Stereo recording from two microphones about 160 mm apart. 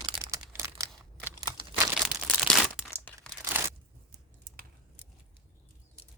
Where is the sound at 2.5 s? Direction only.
Centre (ahead or behind).